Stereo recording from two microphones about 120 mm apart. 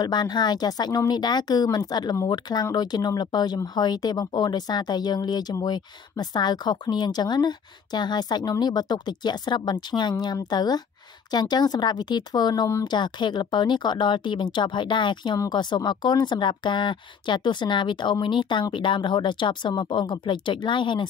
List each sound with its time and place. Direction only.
0.0 s speech: 35° left (ahead or behind)